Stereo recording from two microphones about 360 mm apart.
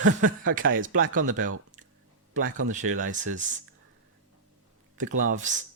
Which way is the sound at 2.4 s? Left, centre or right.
Right.